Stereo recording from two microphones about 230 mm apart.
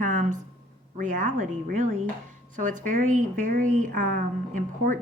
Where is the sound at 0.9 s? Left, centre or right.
Right.